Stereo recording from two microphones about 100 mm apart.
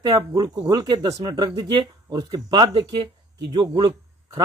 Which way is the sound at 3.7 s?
40° right (ahead or behind).